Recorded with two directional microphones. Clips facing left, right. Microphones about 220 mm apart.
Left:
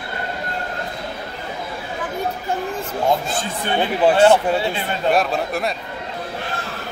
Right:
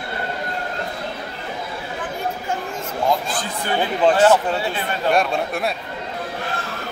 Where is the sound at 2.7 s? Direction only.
25° left (ahead or behind).